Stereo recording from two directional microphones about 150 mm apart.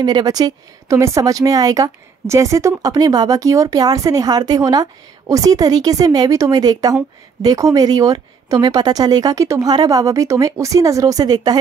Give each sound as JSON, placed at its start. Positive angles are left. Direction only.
{"t": 0.0, "sound": "speech", "side_deg": -25}